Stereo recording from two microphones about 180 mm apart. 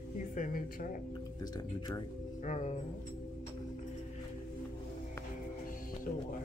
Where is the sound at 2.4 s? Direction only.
40° left (ahead or behind).